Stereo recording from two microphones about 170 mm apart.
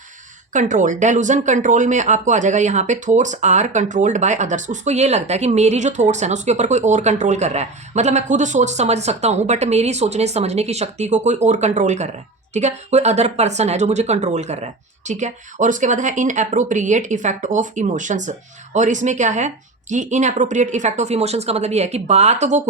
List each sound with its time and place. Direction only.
0.5 s speech: 50° right (ahead or behind)